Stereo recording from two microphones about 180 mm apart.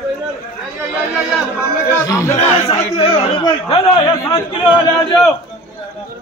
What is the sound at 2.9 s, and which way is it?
Chatter, 30° left (ahead or behind).